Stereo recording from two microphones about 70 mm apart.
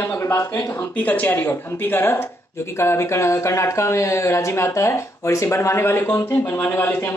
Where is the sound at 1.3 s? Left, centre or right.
Left.